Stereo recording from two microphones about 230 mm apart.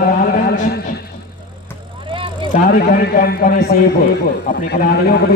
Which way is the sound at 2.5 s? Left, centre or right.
Left.